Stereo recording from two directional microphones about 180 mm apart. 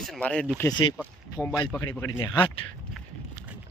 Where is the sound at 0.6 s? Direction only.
25° left (ahead or behind).